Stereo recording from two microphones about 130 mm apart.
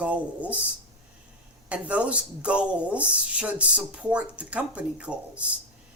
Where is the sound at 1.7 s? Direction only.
10° right (ahead or behind).